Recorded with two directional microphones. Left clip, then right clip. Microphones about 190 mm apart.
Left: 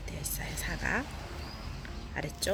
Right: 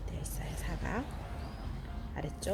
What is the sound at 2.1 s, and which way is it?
Speech, centre (ahead or behind).